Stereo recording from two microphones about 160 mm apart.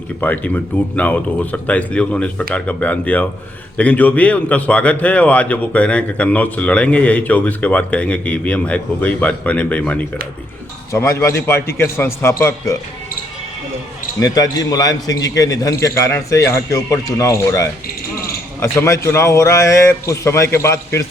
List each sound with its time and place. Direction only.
0.2 s a man's voice: 10° left (ahead or behind)
14.2 s a man's voice: 25° left (ahead or behind)
17.8 s a sound: 70° left (ahead or behind)
18.6 s a man's voice: 15° left (ahead or behind)